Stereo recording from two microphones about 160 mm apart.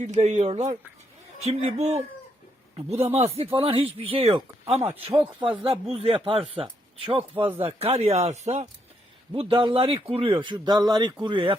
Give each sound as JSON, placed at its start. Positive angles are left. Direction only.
{"t": 0.0, "sound": "speech", "side_deg": -45}
{"t": 1.8, "sound": "speech", "side_deg": -45}
{"t": 4.8, "sound": "speech", "side_deg": -10}
{"t": 5.4, "sound": "speech", "side_deg": -30}
{"t": 9.3, "sound": "speech", "side_deg": -30}